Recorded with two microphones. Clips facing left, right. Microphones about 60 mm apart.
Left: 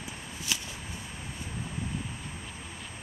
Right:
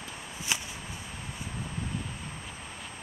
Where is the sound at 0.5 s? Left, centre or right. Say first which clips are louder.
Right 2 dB; right.